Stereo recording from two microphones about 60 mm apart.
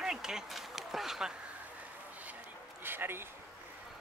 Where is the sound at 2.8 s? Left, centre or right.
Right.